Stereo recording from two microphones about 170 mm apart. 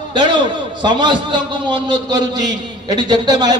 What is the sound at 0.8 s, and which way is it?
A man's voice, 25° right (ahead or behind).